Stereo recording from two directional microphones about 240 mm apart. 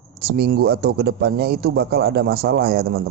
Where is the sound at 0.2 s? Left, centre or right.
Right.